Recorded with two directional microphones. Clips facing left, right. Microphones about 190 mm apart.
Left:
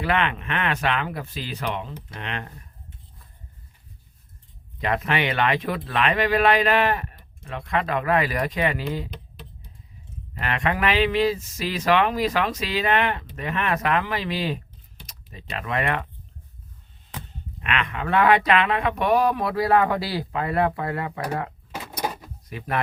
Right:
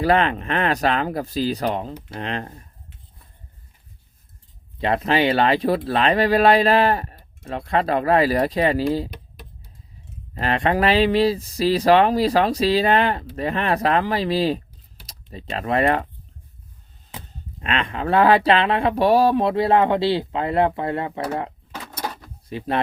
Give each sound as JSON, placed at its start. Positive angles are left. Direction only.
{"t": 0.0, "sound": "speech", "side_deg": -35}
{"t": 4.8, "sound": "speech", "side_deg": -30}
{"t": 10.3, "sound": "speech", "side_deg": -35}
{"t": 17.6, "sound": "speech", "side_deg": -30}
{"t": 22.0, "sound": "door", "side_deg": 15}
{"t": 22.4, "sound": "speech", "side_deg": -30}